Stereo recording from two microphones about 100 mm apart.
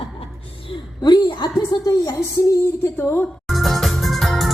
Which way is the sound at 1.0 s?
45° left (ahead or behind).